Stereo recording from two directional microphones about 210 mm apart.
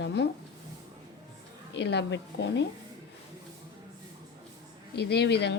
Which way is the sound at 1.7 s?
55° left (ahead or behind).